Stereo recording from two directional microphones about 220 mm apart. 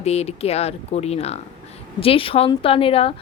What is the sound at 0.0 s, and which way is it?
A woman's voice, 30° left (ahead or behind).